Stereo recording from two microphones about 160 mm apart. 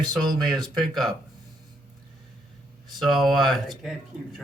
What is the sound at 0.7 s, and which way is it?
Speech, centre (ahead or behind).